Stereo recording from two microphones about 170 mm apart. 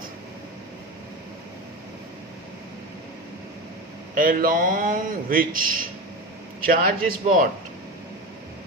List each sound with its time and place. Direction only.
4.1 s a man's voice: 55° right (ahead or behind)